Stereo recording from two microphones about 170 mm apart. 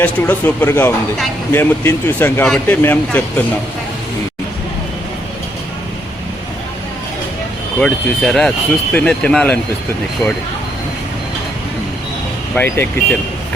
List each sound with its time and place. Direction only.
0.0 s speech: 10° left (ahead or behind)
7.8 s speech: centre (ahead or behind)
12.5 s speech: 10° left (ahead or behind)